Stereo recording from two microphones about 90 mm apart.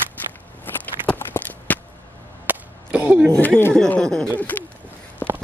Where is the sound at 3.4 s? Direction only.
20° left (ahead or behind).